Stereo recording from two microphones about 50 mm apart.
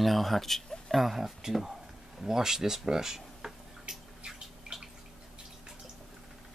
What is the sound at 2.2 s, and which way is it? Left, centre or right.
Drip, centre.